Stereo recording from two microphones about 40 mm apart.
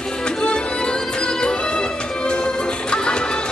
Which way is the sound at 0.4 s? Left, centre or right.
Left.